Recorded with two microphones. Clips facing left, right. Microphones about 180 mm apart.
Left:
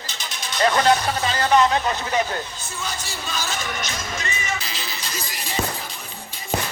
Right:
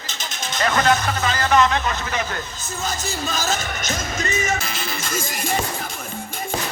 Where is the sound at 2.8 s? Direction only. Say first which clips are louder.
Right 6 dB; 45° right (ahead or behind).